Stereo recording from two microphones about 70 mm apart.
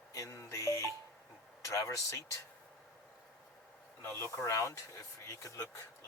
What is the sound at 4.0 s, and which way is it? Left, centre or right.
Speech, left.